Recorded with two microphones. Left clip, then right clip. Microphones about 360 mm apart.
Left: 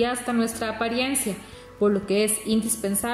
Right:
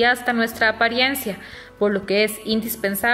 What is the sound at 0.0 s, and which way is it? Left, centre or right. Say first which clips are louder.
A woman's voice: right 6 dB; centre.